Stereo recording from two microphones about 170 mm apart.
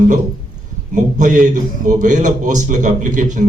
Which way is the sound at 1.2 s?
45° right (ahead or behind).